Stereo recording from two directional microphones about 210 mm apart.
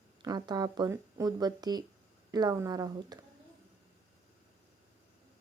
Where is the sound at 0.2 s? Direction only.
20° right (ahead or behind).